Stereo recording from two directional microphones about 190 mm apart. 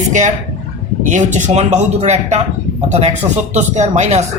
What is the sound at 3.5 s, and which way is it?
Speech, 40° right (ahead or behind).